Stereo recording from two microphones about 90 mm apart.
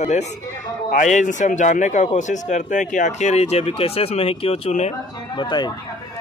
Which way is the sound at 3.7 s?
90° left.